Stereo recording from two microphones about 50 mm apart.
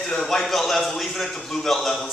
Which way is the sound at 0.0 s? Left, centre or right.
Centre.